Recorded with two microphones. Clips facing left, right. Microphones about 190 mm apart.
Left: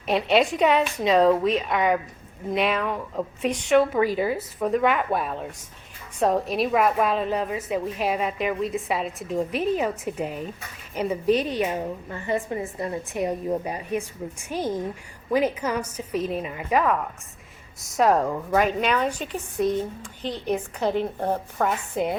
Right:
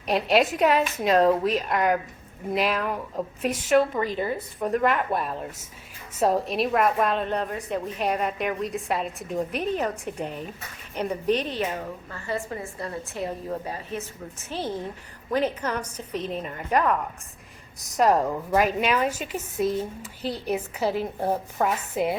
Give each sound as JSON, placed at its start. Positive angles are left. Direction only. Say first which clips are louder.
{"t": 0.1, "sound": "a woman's voice", "louder": "left 1 dB", "side_deg": 0}